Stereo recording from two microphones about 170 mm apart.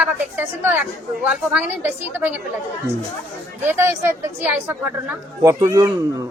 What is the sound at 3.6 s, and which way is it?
A woman's voice, 15° right (ahead or behind).